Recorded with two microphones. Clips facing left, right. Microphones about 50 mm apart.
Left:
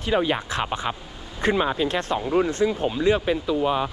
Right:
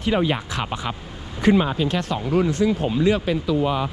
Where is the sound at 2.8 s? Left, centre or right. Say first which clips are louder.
Right 1 dB; left.